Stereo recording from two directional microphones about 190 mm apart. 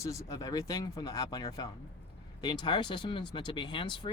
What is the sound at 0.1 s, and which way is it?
Speech, 15° left (ahead or behind).